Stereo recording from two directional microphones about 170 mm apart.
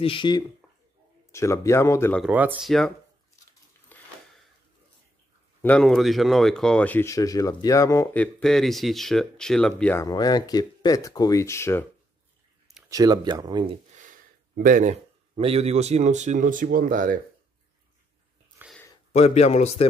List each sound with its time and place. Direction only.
0.0 s speech: 30° left (ahead or behind); by 2.2 s 15° left (ahead or behind)
2.2 s speech: 10° right (ahead or behind)
2.6 s speech: centre (ahead or behind)
3.9 s a sound: centre (ahead or behind)
5.6 s speech: 5° left (ahead or behind)
8.1 s speech: 5° left (ahead or behind)
10.0 s speech: 20° left (ahead or behind)
12.9 s speech: 20° right (ahead or behind)
13.9 s speech: 50° right (ahead or behind)
18.6 s a sound: 10° right (ahead or behind)
19.1 s speech: 40° left (ahead or behind)